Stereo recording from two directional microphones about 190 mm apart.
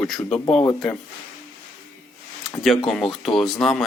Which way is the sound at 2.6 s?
Centre (ahead or behind).